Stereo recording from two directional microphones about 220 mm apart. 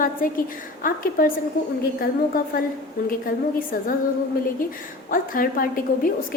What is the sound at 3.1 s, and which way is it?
Speech, 40° left (ahead or behind).